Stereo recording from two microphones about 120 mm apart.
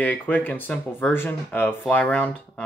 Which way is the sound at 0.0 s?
15° left (ahead or behind).